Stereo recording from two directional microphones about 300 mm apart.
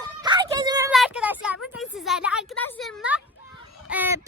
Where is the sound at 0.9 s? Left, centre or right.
Centre.